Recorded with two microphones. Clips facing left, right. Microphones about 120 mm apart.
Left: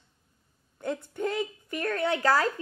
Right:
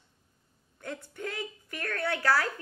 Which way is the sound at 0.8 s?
20° left (ahead or behind).